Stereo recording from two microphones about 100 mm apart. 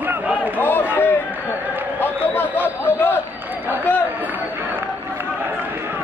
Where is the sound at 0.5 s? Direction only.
20° left (ahead or behind).